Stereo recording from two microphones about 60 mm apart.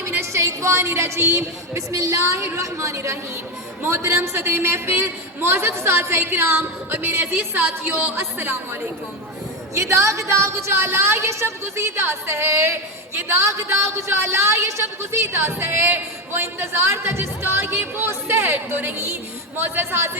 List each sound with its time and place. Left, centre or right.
0.3 s a woman's voice: right
3.8 s a man's voice: right
7.5 s a woman's voice: right
7.9 s a man's voice: right
9.7 s a woman's voice: right
18.9 s a man's voice: right